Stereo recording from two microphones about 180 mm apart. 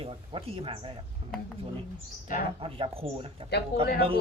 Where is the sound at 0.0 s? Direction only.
30° right (ahead or behind).